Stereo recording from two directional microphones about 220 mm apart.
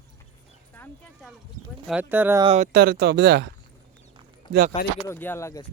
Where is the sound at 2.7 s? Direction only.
45° right (ahead or behind).